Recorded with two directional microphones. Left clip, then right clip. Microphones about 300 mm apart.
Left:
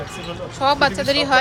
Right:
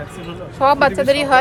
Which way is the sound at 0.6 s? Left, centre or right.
Centre.